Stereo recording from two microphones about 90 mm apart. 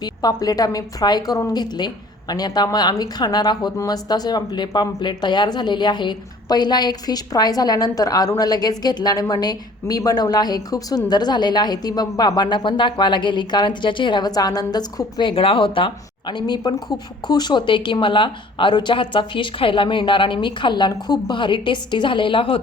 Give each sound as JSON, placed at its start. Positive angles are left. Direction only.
{"t": 0.0, "sound": "speech", "side_deg": 45}
{"t": 14.3, "sound": "a woman's voice", "side_deg": 45}
{"t": 16.7, "sound": "a woman's voice", "side_deg": 50}